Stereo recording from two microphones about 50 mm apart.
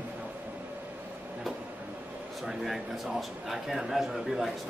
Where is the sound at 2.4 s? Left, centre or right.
Centre.